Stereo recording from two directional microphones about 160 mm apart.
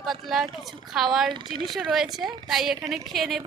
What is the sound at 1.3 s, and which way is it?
Speech, 30° right (ahead or behind).